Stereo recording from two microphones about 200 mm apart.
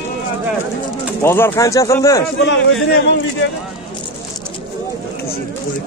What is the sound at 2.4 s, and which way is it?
Speech, 60° left (ahead or behind).